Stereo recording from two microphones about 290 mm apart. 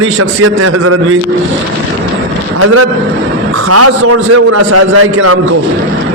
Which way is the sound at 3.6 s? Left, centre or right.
Right.